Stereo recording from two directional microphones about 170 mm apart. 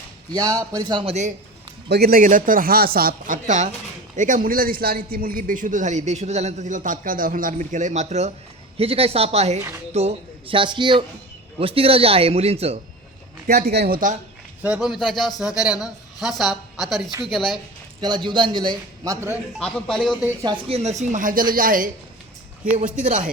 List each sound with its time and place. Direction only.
0.3 s a man's voice: 20° right (ahead or behind)
1.9 s a man's voice: 65° right (ahead or behind); by 12.8 s 35° right (ahead or behind)
13.5 s a man's voice: 70° right (ahead or behind)
14.6 s a man's voice: 5° right (ahead or behind)
18.0 s a man's voice: 25° right (ahead or behind)
19.5 s a man's voice: centre (ahead or behind)
20.4 s a man's voice: 25° right (ahead or behind)
20.7 s a man's voice: 40° right (ahead or behind)
23.0 s a man's voice: 50° right (ahead or behind)